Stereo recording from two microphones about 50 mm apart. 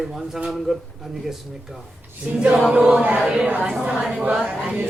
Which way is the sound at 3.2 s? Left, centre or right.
Centre.